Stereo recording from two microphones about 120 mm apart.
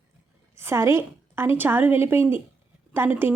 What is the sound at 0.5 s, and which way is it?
A woman's voice, 20° right (ahead or behind).